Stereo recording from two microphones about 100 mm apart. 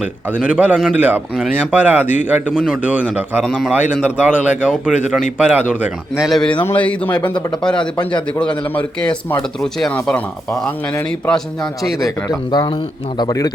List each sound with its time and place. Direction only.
0.0 s a man's voice: 10° right (ahead or behind)
3.4 s a man's voice: 5° right (ahead or behind)
6.2 s a man's voice: centre (ahead or behind)
6.5 s speech: 15° left (ahead or behind)
9.6 s a man's voice: 5° left (ahead or behind)
9.9 s speech: 15° left (ahead or behind)
11.3 s a man's voice: 5° left (ahead or behind)
12.3 s a man's voice: 45° left (ahead or behind)